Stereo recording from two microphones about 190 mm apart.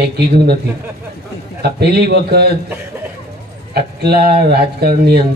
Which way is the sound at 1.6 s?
60° right (ahead or behind).